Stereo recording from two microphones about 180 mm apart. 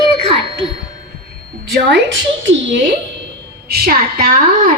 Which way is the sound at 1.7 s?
85° right.